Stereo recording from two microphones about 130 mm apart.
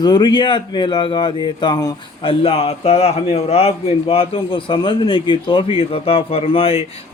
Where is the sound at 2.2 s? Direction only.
45° left (ahead or behind).